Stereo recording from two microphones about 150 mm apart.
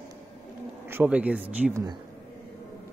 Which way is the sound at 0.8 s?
10° right (ahead or behind).